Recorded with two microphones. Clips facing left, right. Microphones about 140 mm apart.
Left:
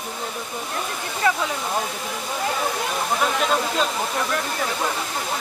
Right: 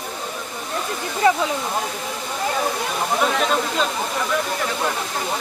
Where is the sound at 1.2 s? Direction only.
25° right (ahead or behind).